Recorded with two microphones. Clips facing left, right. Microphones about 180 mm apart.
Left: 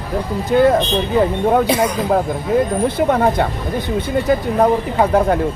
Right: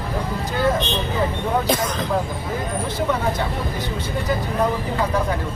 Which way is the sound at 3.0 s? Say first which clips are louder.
Left 6 dB; 55° left (ahead or behind).